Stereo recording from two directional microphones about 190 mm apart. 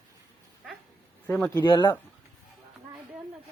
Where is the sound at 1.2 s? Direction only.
10° left (ahead or behind).